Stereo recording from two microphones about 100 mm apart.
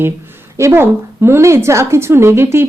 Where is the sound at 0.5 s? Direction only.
30° right (ahead or behind).